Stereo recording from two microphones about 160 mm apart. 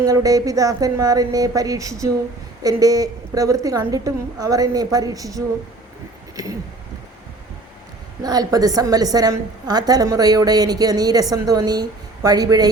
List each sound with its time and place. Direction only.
0.0 s a woman's voice: 20° right (ahead or behind)
8.2 s a woman's voice: 25° right (ahead or behind)